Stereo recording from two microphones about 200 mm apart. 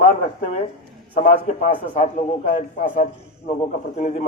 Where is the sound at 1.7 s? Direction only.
30° left (ahead or behind).